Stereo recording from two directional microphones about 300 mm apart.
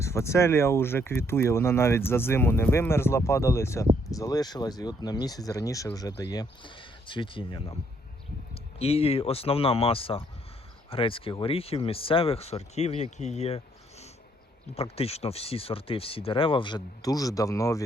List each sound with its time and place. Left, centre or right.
0.0 s speech: centre
8.8 s speech: centre
14.8 s speech: centre